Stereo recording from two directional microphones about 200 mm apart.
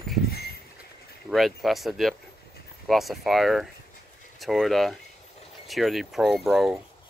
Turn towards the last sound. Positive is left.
turn(degrees=0)  # may be behind; listen again after turning